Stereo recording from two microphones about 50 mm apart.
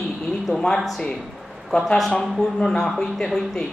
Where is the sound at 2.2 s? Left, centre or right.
Centre.